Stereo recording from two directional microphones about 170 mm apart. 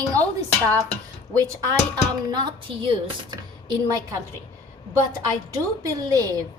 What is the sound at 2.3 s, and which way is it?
A woman's voice, 25° right (ahead or behind).